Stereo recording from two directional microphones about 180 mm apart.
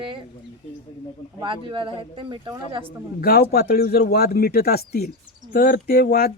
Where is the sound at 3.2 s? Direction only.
55° left (ahead or behind).